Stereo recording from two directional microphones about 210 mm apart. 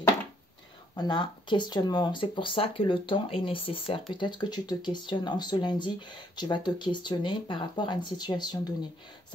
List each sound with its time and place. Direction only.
0.9 s speech: 20° left (ahead or behind)